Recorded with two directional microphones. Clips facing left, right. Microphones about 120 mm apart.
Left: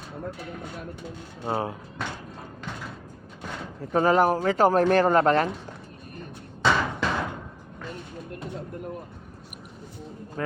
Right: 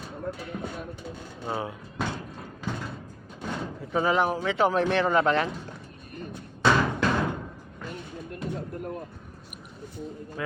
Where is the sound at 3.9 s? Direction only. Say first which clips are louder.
Left 4 dB; 45° left (ahead or behind).